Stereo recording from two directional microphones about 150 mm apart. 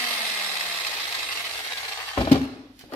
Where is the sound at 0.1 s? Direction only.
10° left (ahead or behind).